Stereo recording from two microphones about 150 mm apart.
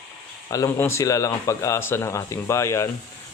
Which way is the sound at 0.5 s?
20° left (ahead or behind).